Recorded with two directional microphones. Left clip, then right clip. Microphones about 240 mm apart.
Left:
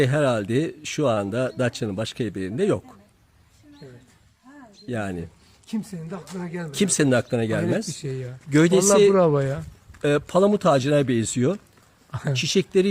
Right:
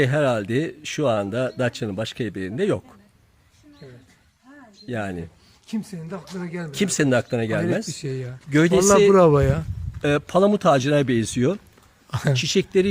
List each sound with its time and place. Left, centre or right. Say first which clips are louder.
0.0 s speech: right 1 dB; centre
4.9 s speech: right 1 dB; centre
5.6 s speech: right 1 dB; centre
6.7 s speech: even; centre
7.9 s speech: right 2 dB; right
8.4 s speech: even; centre
9.1 s speech: right 4 dB; right
10.0 s speech: right 1 dB; centre